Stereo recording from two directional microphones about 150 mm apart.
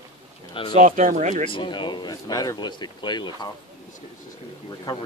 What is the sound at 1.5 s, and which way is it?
Speech, 30° left (ahead or behind).